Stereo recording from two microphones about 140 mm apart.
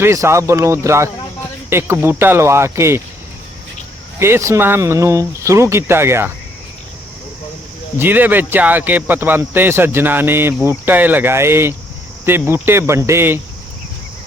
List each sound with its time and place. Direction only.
0.0 s speech: 20° right (ahead or behind)
4.2 s speech: 20° right (ahead or behind)
7.9 s speech: 15° right (ahead or behind)